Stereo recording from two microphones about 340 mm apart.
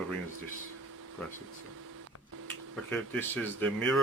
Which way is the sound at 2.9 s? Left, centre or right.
Centre.